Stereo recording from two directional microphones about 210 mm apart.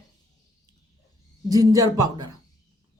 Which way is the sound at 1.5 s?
15° right (ahead or behind).